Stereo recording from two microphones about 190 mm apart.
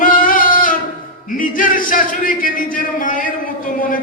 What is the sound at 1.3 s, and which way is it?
A man's voice, 45° left (ahead or behind).